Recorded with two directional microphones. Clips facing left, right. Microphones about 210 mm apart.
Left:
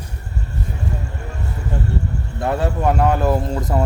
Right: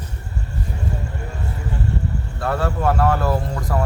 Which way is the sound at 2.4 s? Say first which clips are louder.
Left 2 dB; 20° left (ahead or behind).